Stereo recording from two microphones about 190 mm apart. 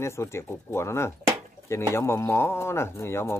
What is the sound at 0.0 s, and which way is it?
Speech, 15° left (ahead or behind).